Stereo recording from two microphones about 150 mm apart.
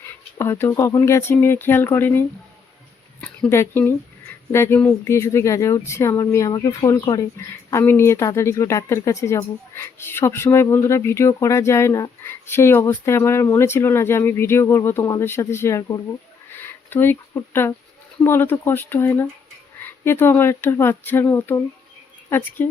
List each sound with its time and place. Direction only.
0.3 s speech: 15° left (ahead or behind)
16.5 s a sound: 15° left (ahead or behind)
18.2 s speech: 15° left (ahead or behind)